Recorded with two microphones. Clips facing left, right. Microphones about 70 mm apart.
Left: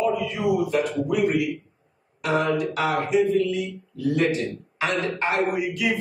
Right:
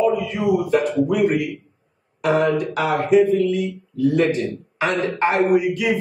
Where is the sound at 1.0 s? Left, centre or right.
Right.